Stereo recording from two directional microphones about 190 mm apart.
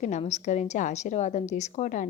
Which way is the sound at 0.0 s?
35° left (ahead or behind).